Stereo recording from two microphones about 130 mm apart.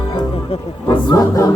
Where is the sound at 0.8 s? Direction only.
30° left (ahead or behind).